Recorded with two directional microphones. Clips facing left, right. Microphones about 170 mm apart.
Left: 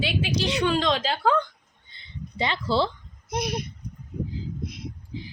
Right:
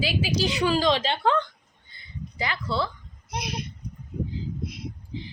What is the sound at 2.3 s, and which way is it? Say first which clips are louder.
Speech: left 4 dB; 25° left (ahead or behind).